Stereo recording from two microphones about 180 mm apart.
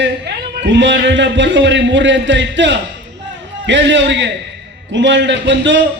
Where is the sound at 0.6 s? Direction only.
85° right.